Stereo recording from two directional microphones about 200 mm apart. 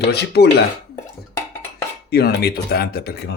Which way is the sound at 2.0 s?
50° left (ahead or behind).